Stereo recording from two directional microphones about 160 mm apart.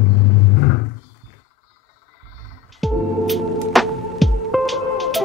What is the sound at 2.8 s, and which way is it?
Music, centre (ahead or behind).